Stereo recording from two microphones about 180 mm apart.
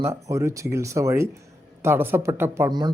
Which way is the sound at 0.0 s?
15° right (ahead or behind).